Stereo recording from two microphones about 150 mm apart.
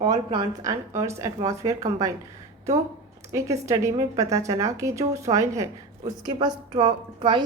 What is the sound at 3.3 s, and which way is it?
A woman's voice, 20° right (ahead or behind).